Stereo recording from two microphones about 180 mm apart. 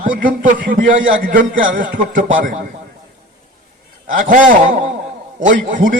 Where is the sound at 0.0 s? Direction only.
50° right (ahead or behind).